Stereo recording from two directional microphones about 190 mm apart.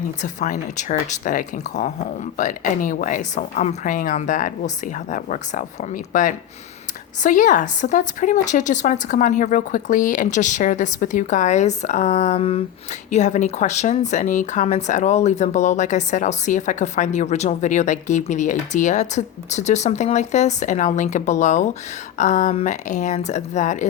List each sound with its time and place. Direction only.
0.2 s speech: 40° left (ahead or behind)